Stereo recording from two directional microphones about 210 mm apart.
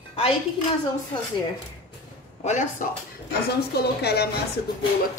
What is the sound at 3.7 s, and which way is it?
Speech, 50° left (ahead or behind).